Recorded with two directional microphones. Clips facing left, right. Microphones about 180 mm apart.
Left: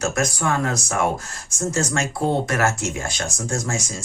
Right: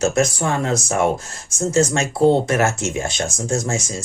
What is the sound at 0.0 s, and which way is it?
Speech, 25° right (ahead or behind).